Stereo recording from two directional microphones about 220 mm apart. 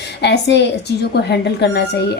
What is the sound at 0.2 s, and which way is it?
A woman's voice, 50° left (ahead or behind).